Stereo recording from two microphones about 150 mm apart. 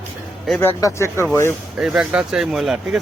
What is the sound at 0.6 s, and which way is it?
Speech, 20° left (ahead or behind).